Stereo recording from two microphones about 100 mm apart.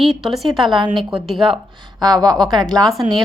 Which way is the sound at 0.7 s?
50° right (ahead or behind).